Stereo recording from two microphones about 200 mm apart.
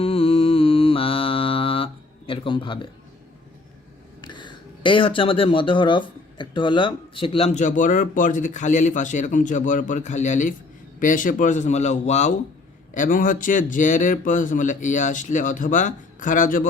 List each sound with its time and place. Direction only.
0.0 s mantra: 30° left (ahead or behind)
4.2 s speech: 25° left (ahead or behind); by 16.6 s 40° left (ahead or behind)